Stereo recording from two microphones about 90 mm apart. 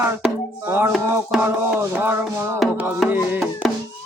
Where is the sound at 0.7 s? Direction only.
25° right (ahead or behind).